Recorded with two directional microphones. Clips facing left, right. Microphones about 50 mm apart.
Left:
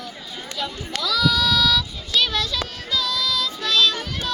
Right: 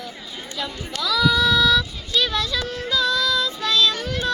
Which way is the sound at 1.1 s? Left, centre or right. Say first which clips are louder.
Right 2 dB; centre.